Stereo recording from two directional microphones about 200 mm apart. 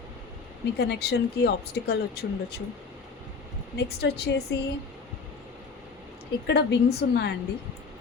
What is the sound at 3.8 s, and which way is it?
Speech, 55° left (ahead or behind).